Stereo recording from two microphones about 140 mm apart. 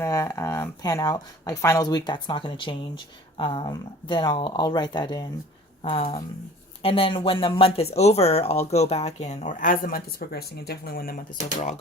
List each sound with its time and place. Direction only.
0.0 s speech: 20° left (ahead or behind); by 11.2 s 90° left